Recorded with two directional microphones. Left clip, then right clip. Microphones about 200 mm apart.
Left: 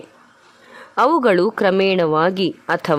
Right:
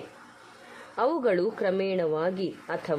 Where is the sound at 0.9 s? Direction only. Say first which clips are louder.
Left 11 dB; 35° left (ahead or behind).